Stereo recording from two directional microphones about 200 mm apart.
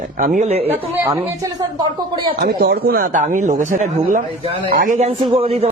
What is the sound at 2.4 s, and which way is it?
Speech, 50° right (ahead or behind).